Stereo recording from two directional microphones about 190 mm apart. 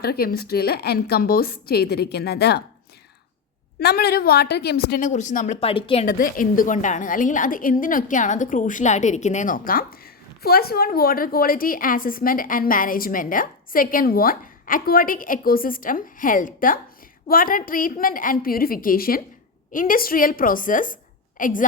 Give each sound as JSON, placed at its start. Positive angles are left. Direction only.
{"t": 0.0, "sound": "a woman's voice", "side_deg": 55}
{"t": 3.8, "sound": "a woman's voice", "side_deg": 55}
{"t": 5.5, "sound": "speech", "side_deg": 30}
{"t": 6.1, "sound": "a woman's voice", "side_deg": 45}